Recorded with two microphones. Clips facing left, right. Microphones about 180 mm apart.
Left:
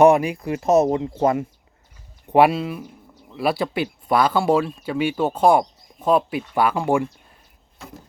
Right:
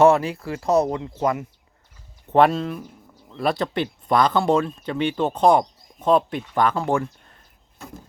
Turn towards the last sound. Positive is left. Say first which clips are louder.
# left 3 dB
turn(degrees=10)  # may be behind; listen again after turning